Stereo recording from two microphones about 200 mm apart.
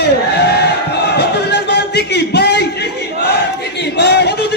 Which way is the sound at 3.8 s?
60° left (ahead or behind).